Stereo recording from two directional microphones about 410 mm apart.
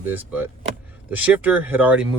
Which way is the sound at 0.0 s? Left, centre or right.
Centre.